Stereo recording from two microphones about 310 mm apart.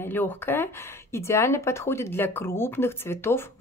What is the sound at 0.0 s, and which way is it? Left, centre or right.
Speech, centre.